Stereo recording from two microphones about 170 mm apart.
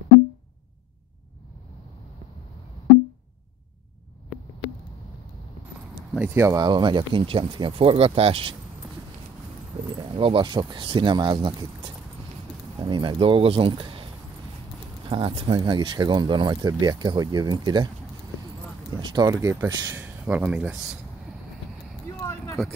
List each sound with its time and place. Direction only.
6.1 s speech: 10° right (ahead or behind); by 8.5 s 30° right (ahead or behind)
10.1 s speech: 30° right (ahead or behind)
15.0 s speech: 30° right (ahead or behind)
18.9 s speech: 25° right (ahead or behind); by 20.8 s 5° right (ahead or behind)
22.2 s a sound: 15° left (ahead or behind)